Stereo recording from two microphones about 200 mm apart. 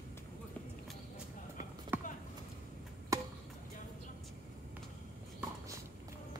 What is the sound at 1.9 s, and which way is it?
Clip-clop, 10° right (ahead or behind).